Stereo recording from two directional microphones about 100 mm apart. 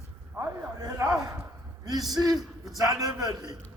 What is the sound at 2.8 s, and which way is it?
Speech, 40° right (ahead or behind).